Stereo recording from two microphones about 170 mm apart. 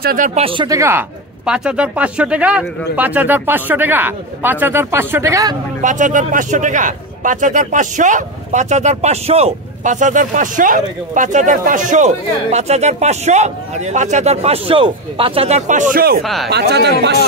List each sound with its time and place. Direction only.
0.0 s speech: 55° right (ahead or behind)
0.3 s speech: 35° right (ahead or behind)
0.7 s speech: 15° right (ahead or behind)
1.4 s speech: 5° right (ahead or behind); by 5.6 s 20° right (ahead or behind)
5.8 s a man's voice: 50° right (ahead or behind)
16.2 s speech: centre (ahead or behind)
16.4 s speech: 75° right (ahead or behind)